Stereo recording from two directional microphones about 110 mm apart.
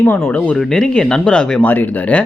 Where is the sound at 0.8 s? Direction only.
10° left (ahead or behind).